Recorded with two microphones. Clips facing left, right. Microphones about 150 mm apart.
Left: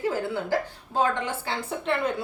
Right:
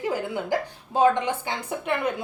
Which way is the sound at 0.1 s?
15° right (ahead or behind).